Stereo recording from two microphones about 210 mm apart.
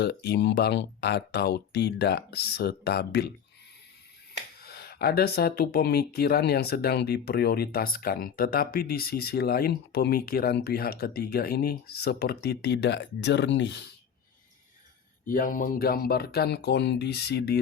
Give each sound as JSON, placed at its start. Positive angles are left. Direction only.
{"t": 0.0, "sound": "speech", "side_deg": 50}
{"t": 4.6, "sound": "speech", "side_deg": 50}
{"t": 15.3, "sound": "speech", "side_deg": 40}